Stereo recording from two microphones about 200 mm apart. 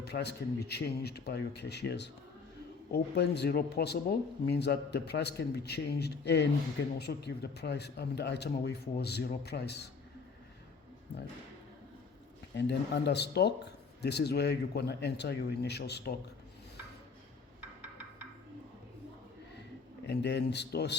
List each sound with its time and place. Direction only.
0.0 s speech: 55° left (ahead or behind)
11.1 s speech: 55° left (ahead or behind)
12.5 s speech: 55° left (ahead or behind)
20.1 s speech: 60° left (ahead or behind)